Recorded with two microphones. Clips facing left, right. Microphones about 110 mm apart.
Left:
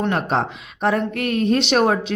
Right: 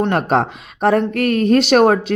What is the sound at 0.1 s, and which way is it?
Speech, 50° right (ahead or behind).